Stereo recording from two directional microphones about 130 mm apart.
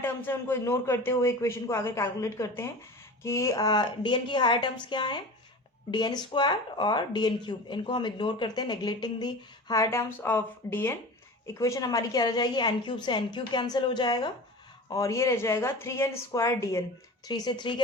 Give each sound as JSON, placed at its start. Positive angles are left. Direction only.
{"t": 0.0, "sound": "speech", "side_deg": 15}